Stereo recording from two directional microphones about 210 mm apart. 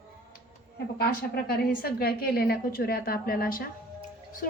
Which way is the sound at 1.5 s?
45° left (ahead or behind).